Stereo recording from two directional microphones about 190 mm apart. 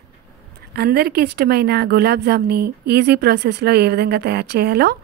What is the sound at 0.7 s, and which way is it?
A woman's voice, 55° right (ahead or behind).